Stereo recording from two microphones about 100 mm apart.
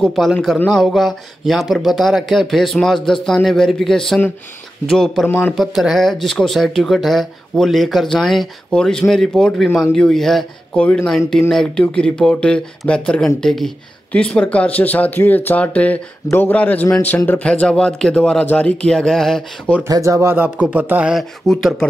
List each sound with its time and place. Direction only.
0.0 s speech: centre (ahead or behind)
10.7 s a man's voice: 15° left (ahead or behind)
19.9 s speech: 30° right (ahead or behind)
20.3 s speech: 15° right (ahead or behind)
21.1 s speech: centre (ahead or behind)